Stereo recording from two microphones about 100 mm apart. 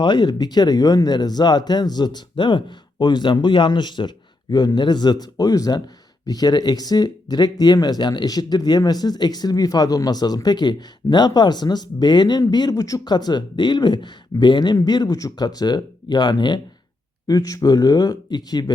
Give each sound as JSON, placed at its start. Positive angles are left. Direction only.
{"t": 0.0, "sound": "speech", "side_deg": 50}